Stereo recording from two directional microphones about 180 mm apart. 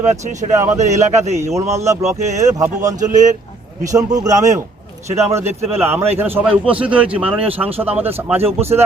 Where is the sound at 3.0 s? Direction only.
45° right (ahead or behind).